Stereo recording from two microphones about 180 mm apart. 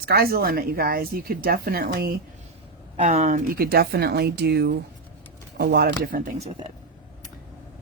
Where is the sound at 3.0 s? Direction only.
40° right (ahead or behind).